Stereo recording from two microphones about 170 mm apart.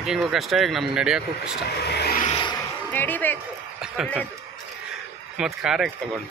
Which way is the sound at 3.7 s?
5° right (ahead or behind).